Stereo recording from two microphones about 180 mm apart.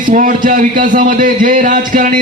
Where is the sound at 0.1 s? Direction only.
50° right (ahead or behind).